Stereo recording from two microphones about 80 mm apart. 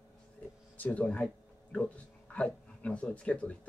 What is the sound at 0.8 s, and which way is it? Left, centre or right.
Speech, centre.